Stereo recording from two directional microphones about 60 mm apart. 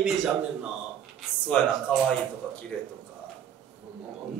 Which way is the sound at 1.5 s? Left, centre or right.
Left.